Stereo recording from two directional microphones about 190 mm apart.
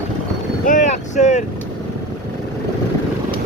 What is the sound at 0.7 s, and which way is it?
Boat, 40° left (ahead or behind).